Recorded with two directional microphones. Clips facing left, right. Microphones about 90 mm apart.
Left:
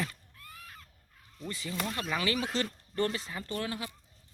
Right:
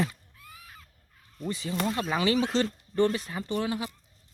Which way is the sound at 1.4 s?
20° right (ahead or behind).